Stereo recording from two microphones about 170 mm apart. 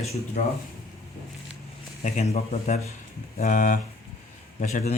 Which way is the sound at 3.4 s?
50° left (ahead or behind).